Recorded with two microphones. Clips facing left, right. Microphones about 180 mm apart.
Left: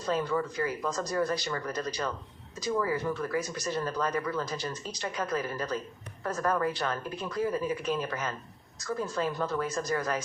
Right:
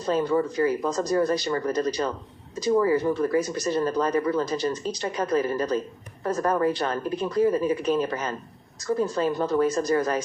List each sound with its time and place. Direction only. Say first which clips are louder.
0.0 s speech: right 6 dB; 35° right (ahead or behind)